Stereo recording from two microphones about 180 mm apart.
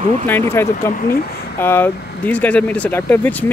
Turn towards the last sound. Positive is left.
turn(degrees=10)  # may be behind; listen again after turning